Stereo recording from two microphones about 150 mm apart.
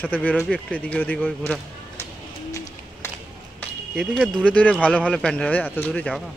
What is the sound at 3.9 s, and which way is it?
Speech, 5° left (ahead or behind).